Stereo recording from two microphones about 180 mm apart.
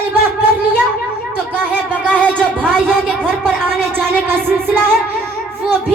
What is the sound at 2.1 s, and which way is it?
Music, 5° left (ahead or behind).